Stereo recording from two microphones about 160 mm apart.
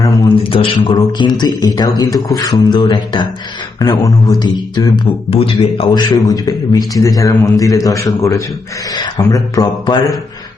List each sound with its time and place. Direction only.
0.3 s a man's voice: 35° left (ahead or behind)
6.2 s speech: 25° left (ahead or behind)